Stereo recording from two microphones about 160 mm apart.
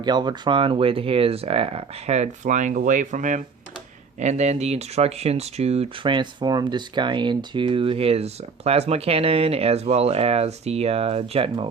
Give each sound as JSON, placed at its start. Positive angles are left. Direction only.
{"t": 0.0, "sound": "speech", "side_deg": -25}